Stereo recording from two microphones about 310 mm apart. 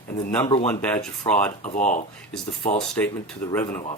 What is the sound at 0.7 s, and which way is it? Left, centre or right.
Speech, centre.